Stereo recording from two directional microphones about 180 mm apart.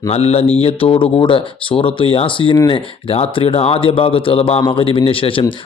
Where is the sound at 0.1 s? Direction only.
35° left (ahead or behind).